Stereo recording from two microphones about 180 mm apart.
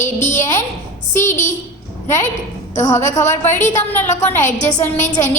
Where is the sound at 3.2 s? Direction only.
15° left (ahead or behind).